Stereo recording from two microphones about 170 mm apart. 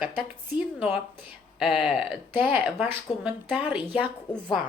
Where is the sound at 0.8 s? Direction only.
10° right (ahead or behind).